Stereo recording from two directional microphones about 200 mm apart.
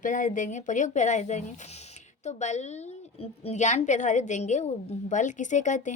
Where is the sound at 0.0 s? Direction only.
40° left (ahead or behind).